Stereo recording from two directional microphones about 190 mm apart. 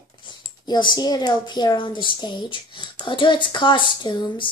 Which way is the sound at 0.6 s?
25° left (ahead or behind).